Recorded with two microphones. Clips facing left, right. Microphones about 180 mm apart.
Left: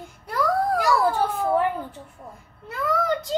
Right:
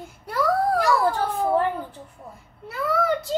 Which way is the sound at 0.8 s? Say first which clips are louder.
Even; 10° left (ahead or behind).